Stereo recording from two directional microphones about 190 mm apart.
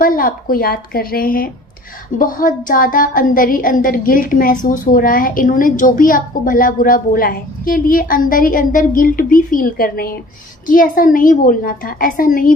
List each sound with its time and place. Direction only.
0.0 s a woman's voice: 45° left (ahead or behind)